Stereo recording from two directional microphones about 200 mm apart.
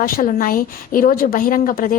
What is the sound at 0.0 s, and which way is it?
A woman's voice, 45° left (ahead or behind).